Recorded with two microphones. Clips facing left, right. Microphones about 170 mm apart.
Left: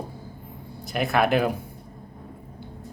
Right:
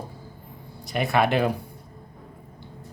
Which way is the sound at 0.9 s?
Centre (ahead or behind).